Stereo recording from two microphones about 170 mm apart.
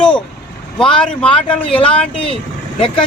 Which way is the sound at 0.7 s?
5° left (ahead or behind).